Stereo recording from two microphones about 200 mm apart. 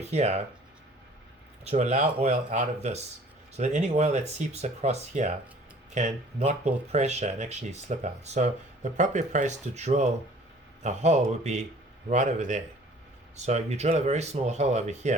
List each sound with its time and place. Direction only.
0.0 s speech: 35° right (ahead or behind)
1.6 s speech: 35° right (ahead or behind)